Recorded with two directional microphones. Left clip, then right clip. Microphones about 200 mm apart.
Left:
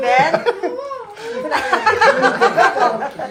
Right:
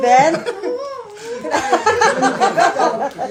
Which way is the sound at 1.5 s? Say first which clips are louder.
Right 1 dB; 65° right (ahead or behind).